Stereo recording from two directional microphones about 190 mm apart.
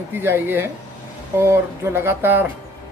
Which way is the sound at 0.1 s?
10° right (ahead or behind).